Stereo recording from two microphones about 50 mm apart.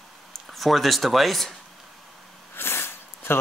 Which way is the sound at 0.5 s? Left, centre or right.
Centre.